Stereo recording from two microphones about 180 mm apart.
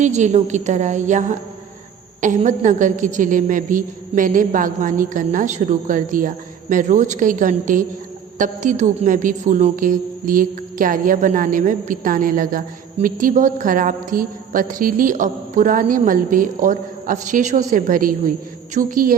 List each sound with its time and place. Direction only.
0.0 s a woman's voice: 40° right (ahead or behind)